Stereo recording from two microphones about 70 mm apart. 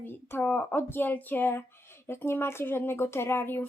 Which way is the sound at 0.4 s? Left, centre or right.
Centre.